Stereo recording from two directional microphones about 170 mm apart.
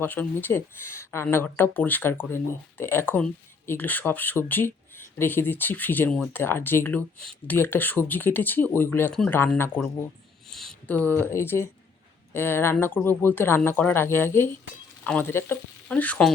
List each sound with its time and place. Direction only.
0.0 s speech: 10° left (ahead or behind)